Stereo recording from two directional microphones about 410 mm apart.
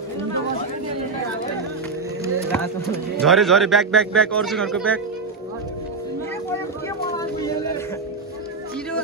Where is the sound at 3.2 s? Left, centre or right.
Centre.